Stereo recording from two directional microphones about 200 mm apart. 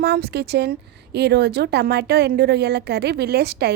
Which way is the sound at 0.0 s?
55° right (ahead or behind).